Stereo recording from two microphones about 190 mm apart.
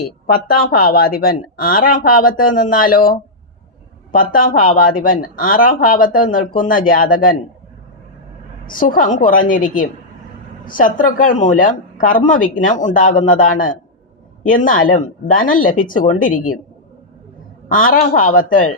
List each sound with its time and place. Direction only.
0.0 s speech: 55° left (ahead or behind)
8.6 s speech: 45° left (ahead or behind)
17.7 s speech: 45° left (ahead or behind)